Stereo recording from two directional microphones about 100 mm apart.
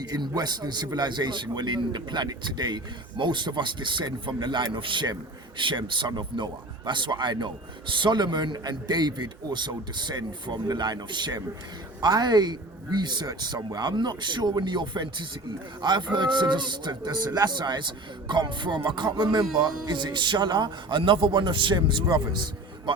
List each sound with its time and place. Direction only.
0.0 s a man's voice: 40° right (ahead or behind)